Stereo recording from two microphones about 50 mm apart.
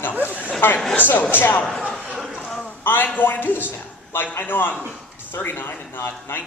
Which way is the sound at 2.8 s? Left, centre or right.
Left.